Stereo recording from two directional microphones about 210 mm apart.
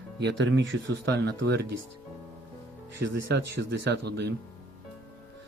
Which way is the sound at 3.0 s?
55° right (ahead or behind).